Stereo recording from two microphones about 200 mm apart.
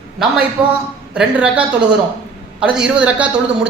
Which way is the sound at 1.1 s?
5° right (ahead or behind).